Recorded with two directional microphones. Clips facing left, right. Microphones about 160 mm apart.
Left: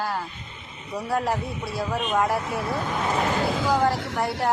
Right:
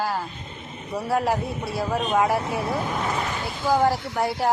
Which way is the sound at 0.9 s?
Centre (ahead or behind).